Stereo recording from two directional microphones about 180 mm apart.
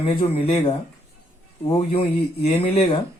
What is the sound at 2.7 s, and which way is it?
Speech, 30° left (ahead or behind).